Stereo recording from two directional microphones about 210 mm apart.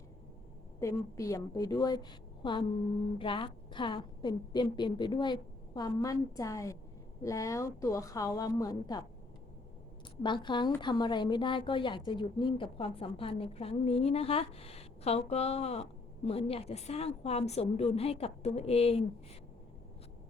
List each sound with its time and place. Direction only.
0.8 s a woman's voice: 15° left (ahead or behind)
10.2 s a woman's voice: 20° left (ahead or behind)